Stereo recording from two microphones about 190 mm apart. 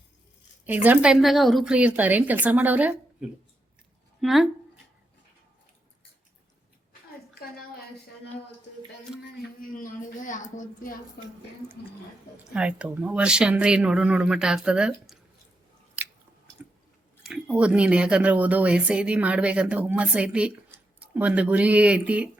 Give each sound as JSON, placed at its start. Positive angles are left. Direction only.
{"t": 0.6, "sound": "speech", "side_deg": -10}
{"t": 9.6, "sound": "a woman's voice", "side_deg": 45}
{"t": 12.5, "sound": "speech", "side_deg": -5}
{"t": 17.2, "sound": "speech", "side_deg": -5}